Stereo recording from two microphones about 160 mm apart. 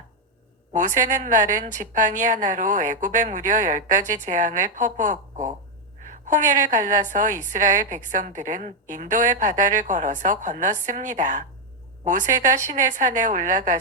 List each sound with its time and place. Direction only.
0.7 s a woman's voice: 55° right (ahead or behind)